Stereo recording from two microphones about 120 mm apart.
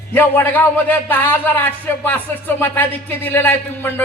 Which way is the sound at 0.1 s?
15° left (ahead or behind).